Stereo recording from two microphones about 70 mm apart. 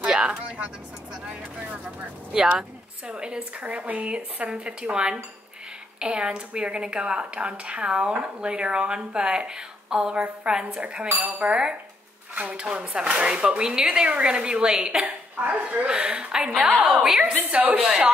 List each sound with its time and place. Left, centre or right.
0.0 s a sound: centre
1.2 s speech: centre
11.1 s speech: right
15.0 s speech: right
17.5 s speech: right